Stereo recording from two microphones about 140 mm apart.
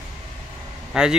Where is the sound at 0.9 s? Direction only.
5° right (ahead or behind).